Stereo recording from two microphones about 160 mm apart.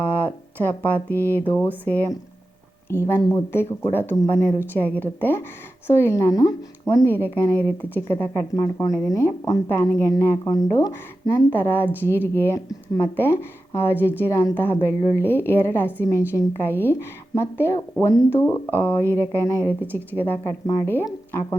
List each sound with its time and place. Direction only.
0.0 s a woman's voice: 10° left (ahead or behind)